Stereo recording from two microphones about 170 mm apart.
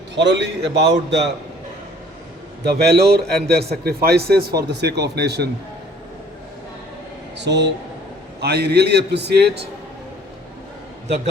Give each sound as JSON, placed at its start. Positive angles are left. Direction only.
{"t": 0.2, "sound": "a man's voice", "side_deg": -90}
{"t": 2.6, "sound": "speech", "side_deg": -80}
{"t": 7.3, "sound": "speech", "side_deg": -90}
{"t": 8.4, "sound": "speech", "side_deg": -75}